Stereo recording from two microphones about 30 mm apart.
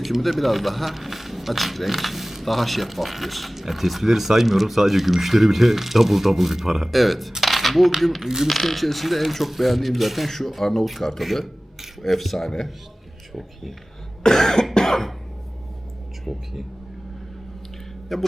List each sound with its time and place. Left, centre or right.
0.0 s speech: centre
7.4 s a sound: centre
8.2 s speech: centre
8.4 s speech: centre
11.2 s speech: centre
12.4 s speech: centre
13.3 s speech: centre
14.3 s cough: centre
18.1 s speech: centre